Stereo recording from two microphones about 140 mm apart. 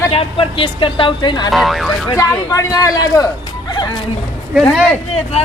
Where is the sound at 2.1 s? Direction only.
25° left (ahead or behind).